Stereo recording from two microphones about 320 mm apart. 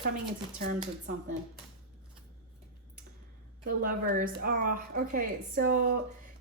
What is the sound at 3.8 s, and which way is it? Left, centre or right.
Speech, right.